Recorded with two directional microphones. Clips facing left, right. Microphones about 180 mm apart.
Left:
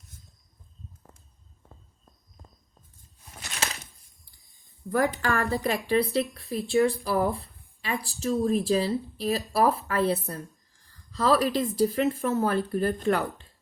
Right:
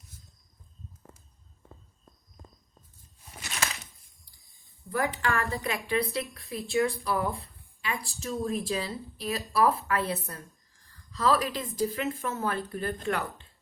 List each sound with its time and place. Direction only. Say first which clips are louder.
4.9 s speech: left 4 dB; 40° left (ahead or behind)